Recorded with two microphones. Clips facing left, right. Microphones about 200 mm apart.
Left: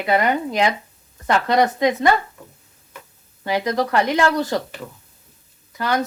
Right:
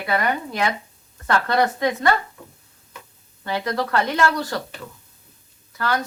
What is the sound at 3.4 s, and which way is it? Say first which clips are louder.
Speech: left 4 dB; 15° left (ahead or behind).